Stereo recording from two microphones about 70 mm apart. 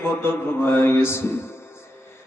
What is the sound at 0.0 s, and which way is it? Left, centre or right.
Mantra, left.